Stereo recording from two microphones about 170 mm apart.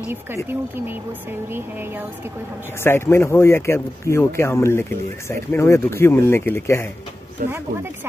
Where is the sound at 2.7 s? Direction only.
15° left (ahead or behind).